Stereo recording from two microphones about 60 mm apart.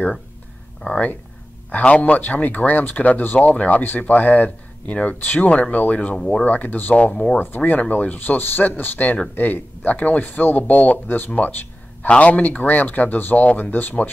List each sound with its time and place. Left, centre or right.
0.8 s speech: left
6.4 s speech: left